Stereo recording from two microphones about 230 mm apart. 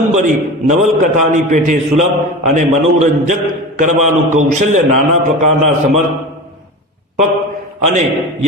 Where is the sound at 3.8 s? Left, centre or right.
Right.